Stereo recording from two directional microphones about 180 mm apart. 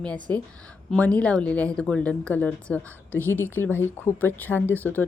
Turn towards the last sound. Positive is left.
turn(degrees=10)  # may be behind; listen again after turning